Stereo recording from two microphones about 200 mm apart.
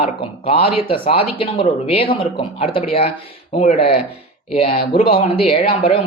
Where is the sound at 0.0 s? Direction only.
30° left (ahead or behind).